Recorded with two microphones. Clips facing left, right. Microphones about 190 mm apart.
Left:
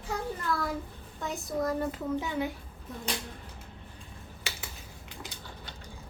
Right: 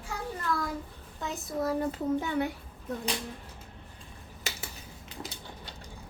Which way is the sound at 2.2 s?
60° right (ahead or behind).